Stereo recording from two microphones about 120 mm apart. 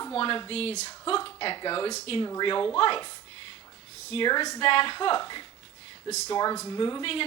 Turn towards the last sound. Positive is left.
turn(degrees=45)  # may be behind; listen again after turning